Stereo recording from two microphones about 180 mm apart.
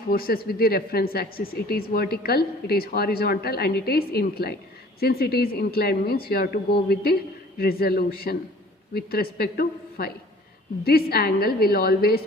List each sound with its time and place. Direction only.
0.1 s speech: 55° left (ahead or behind)